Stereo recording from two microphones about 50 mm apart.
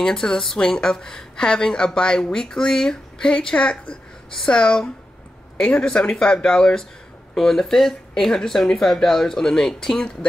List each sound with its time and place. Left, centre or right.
0.0 s a woman's voice: centre